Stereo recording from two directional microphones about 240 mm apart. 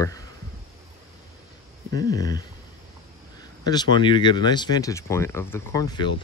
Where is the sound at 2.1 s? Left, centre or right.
Centre.